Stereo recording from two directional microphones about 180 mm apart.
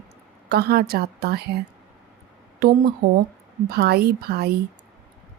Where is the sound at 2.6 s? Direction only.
55° right (ahead or behind).